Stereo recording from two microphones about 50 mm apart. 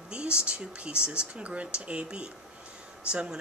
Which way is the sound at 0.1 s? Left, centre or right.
Right.